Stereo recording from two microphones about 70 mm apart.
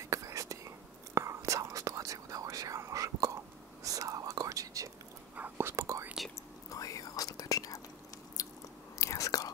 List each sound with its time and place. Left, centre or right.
0.0 s whispering: right
5.6 s whispering: right
6.7 s whispering: left
8.4 s biting: left
8.9 s whispering: left